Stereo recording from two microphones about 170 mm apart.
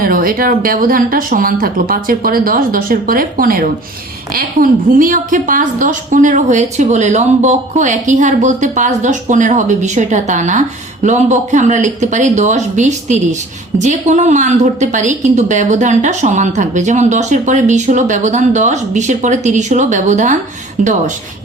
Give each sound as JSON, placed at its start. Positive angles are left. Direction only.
{"t": 0.0, "sound": "a woman's voice", "side_deg": -55}